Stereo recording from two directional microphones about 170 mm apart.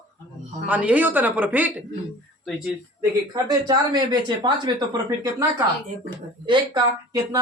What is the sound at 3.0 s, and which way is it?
Speech, 20° right (ahead or behind).